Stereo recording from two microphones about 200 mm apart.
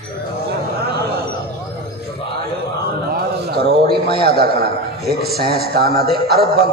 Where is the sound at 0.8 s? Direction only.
50° right (ahead or behind).